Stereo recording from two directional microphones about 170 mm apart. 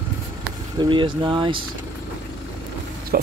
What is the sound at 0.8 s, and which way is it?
Speech, 30° right (ahead or behind).